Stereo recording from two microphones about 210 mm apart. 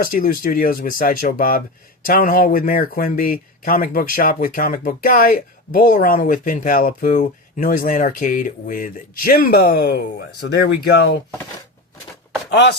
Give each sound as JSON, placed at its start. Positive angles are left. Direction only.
{"t": 0.0, "sound": "speech", "side_deg": 40}